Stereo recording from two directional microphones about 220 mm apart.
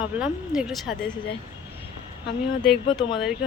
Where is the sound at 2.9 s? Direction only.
20° left (ahead or behind).